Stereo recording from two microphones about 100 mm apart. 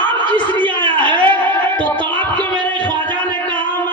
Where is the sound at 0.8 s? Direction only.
50° right (ahead or behind).